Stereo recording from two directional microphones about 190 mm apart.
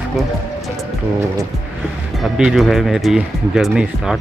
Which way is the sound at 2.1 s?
Centre (ahead or behind).